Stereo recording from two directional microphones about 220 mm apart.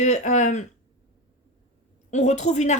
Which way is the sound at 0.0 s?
30° left (ahead or behind).